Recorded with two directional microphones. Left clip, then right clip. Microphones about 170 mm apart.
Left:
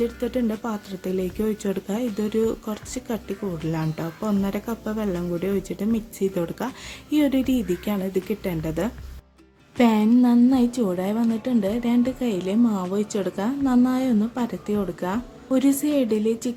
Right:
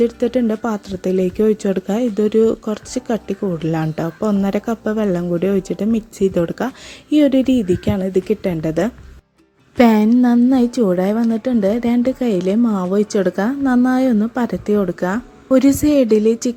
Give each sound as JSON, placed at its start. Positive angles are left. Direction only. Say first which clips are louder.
{"t": 0.0, "sound": "a woman's voice", "louder": "right 8 dB", "side_deg": -35}